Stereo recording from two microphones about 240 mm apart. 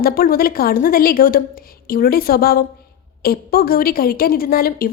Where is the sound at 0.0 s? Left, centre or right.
Left.